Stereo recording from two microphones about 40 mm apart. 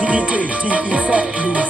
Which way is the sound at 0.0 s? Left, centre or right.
Right.